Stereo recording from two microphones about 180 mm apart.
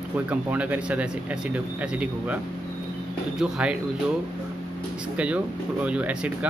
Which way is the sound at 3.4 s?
5° right (ahead or behind).